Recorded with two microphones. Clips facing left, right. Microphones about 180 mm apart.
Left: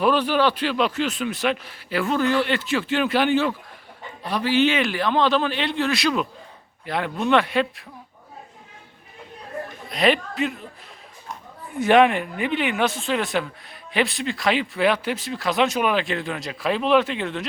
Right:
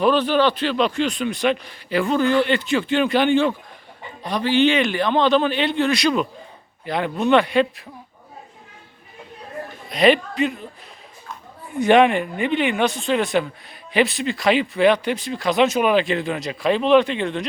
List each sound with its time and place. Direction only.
0.0 s speech: 10° left (ahead or behind)
9.9 s speech: centre (ahead or behind)
11.8 s speech: centre (ahead or behind)